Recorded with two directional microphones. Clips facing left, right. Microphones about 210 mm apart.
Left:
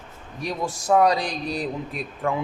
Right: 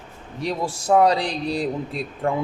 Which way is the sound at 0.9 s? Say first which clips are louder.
Right 2 dB; 30° right (ahead or behind).